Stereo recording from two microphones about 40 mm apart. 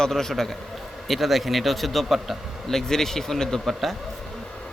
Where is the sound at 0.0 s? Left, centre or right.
Centre.